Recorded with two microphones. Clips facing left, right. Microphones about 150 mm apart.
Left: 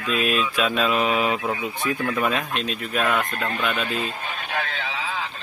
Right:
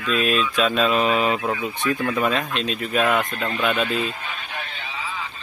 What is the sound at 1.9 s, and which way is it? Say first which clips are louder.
Speech: right 2 dB; 15° right (ahead or behind).